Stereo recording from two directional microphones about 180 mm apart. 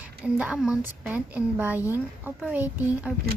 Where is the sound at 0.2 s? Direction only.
5° right (ahead or behind).